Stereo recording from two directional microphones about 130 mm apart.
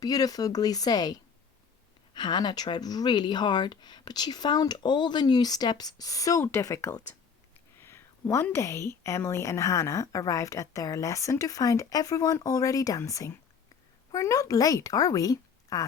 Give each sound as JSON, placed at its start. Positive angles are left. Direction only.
{"t": 0.0, "sound": "a woman's voice", "side_deg": 30}